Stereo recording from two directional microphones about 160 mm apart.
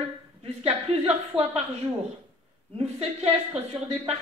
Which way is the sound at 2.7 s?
40° right (ahead or behind).